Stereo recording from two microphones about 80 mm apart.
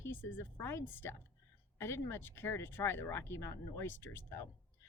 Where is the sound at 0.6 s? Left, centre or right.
Left.